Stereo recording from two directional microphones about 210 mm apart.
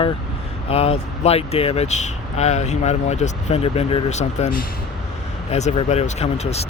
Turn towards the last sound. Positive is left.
turn(degrees=30)  # may be behind; listen again after turning